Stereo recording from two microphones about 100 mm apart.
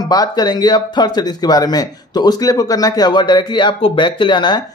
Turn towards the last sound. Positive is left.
turn(degrees=50)  # may be behind; listen again after turning